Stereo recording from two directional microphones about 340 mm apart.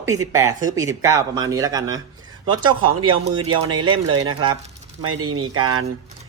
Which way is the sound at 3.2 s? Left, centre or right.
Right.